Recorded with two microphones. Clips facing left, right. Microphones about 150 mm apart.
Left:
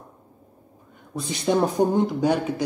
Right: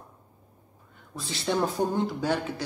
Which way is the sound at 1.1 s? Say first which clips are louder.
Left 6 dB; 15° left (ahead or behind).